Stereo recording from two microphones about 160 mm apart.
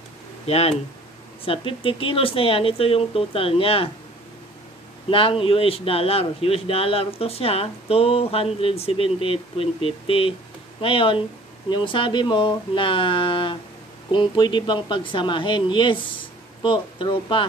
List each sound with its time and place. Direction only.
0.5 s speech: 40° left (ahead or behind)
5.1 s speech: 35° left (ahead or behind)